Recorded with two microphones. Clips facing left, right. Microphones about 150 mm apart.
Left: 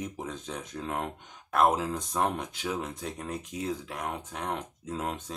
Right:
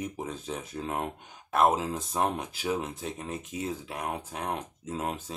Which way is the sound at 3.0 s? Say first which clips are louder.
Even; centre (ahead or behind).